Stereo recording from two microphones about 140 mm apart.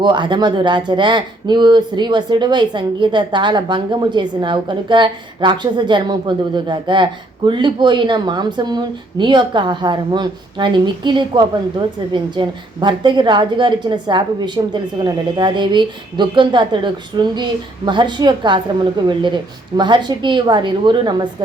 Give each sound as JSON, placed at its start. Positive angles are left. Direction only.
{"t": 0.0, "sound": "speech", "side_deg": -35}